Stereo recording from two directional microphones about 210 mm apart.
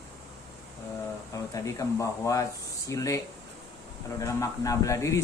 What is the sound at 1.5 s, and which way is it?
A man's voice, 15° left (ahead or behind).